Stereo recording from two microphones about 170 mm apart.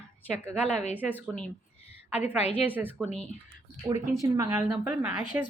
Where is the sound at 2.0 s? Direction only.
10° right (ahead or behind).